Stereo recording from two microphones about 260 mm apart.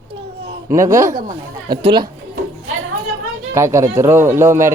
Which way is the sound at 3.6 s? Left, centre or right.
Centre.